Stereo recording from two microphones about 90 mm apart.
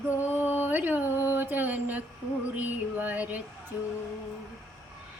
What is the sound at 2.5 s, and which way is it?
Female singing, 20° right (ahead or behind).